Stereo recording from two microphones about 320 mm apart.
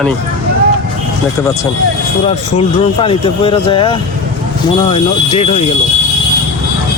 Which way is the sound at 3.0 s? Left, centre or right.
Centre.